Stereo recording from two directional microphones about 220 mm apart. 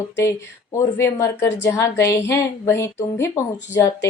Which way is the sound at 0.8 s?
10° left (ahead or behind).